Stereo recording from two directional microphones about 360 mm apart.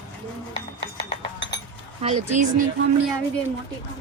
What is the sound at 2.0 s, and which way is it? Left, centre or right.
Speech, centre.